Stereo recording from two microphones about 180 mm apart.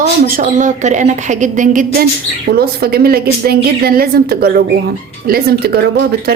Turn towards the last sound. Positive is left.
turn(degrees=-65)  # may be behind; listen again after turning